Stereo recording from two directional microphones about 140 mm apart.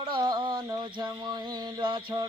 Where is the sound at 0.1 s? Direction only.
30° right (ahead or behind).